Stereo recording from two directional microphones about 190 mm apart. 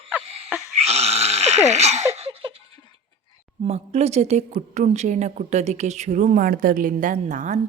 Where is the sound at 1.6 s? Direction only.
35° right (ahead or behind).